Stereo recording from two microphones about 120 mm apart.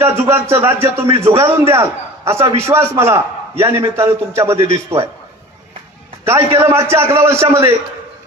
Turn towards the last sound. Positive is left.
turn(degrees=-20)  # may be behind; listen again after turning